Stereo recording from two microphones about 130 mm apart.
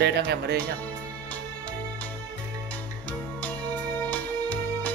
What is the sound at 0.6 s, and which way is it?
Speech, 10° left (ahead or behind).